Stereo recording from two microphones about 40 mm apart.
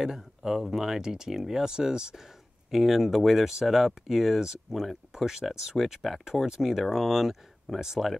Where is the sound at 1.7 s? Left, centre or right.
Centre.